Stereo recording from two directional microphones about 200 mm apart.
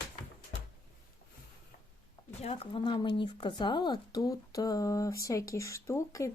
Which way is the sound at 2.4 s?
30° left (ahead or behind).